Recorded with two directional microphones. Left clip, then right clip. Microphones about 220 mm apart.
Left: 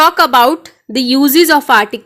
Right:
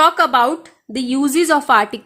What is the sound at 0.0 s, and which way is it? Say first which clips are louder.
A woman's voice: left 5 dB; 20° left (ahead or behind).